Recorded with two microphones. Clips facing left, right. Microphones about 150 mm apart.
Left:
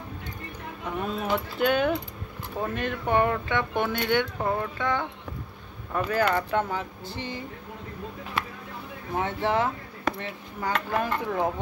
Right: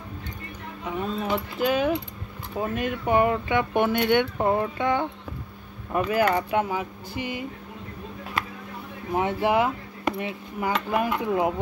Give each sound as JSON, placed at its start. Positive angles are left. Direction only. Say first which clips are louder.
{"t": 1.0, "sound": "speech", "louder": "even", "side_deg": 5}
{"t": 9.1, "sound": "speech", "louder": "right 3 dB", "side_deg": -15}